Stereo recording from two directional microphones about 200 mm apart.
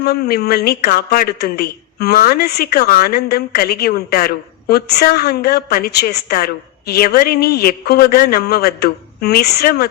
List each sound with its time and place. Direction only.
0.0 s speech: 50° left (ahead or behind)